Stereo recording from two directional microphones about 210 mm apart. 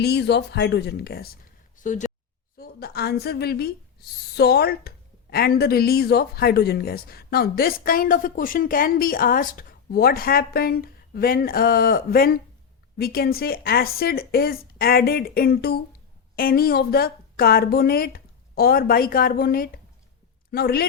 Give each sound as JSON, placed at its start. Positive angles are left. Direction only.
{"t": 0.0, "sound": "speech", "side_deg": 50}
{"t": 2.6, "sound": "a woman's voice", "side_deg": 50}